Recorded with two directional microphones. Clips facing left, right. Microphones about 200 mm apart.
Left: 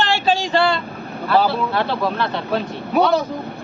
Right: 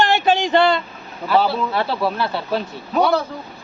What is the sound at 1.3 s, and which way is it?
Speech, centre (ahead or behind).